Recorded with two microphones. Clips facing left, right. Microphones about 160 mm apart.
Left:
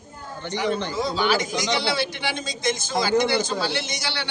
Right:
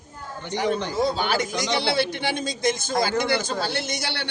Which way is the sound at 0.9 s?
55° right (ahead or behind).